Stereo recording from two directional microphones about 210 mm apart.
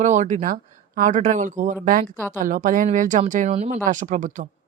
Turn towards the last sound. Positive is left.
turn(degrees=-35)  # may be behind; listen again after turning